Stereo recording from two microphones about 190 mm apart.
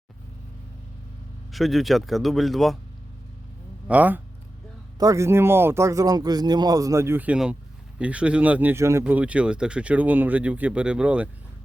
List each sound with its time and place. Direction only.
1.5 s speech: centre (ahead or behind)
3.8 s speech: 10° right (ahead or behind)